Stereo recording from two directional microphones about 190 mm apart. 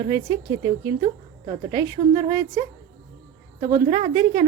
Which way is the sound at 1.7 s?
20° right (ahead or behind).